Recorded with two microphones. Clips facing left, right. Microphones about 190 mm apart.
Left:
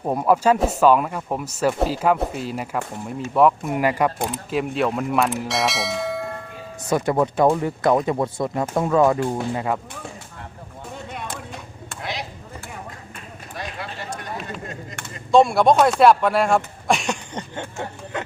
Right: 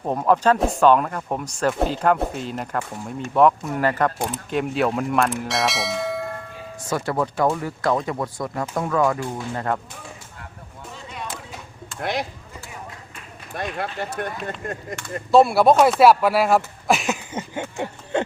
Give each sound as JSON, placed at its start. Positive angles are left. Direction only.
{"t": 0.0, "sound": "speech", "side_deg": 10}
{"t": 6.8, "sound": "speech", "side_deg": 20}
{"t": 9.6, "sound": "speech", "side_deg": 5}
{"t": 10.9, "sound": "a sound", "side_deg": 55}
{"t": 11.9, "sound": "speech", "side_deg": -55}
{"t": 13.6, "sound": "speech", "side_deg": -55}
{"t": 15.3, "sound": "speech", "side_deg": -5}
{"t": 18.1, "sound": "speech", "side_deg": -30}